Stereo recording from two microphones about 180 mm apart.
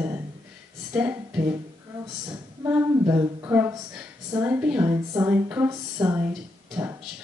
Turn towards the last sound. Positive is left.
turn(degrees=0)  # may be behind; listen again after turning